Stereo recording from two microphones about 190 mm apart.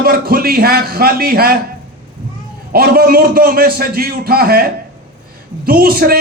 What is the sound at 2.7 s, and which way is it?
A man's voice, 50° right (ahead or behind).